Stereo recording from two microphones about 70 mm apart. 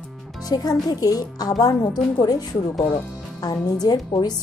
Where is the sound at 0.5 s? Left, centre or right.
Left.